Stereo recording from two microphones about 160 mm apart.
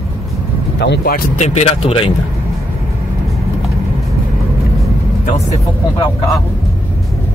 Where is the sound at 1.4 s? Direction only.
45° left (ahead or behind).